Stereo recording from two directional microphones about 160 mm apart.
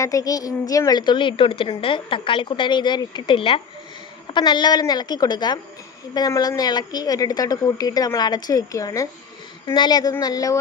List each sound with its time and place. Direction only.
0.0 s a woman's voice: 20° left (ahead or behind)